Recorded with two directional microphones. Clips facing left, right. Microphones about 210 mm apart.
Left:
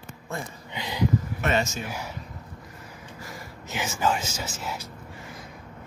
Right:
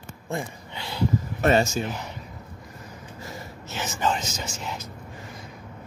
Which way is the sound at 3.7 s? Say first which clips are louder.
Left 1 dB; 10° left (ahead or behind).